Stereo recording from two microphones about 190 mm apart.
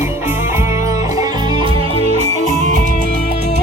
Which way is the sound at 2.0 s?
35° right (ahead or behind).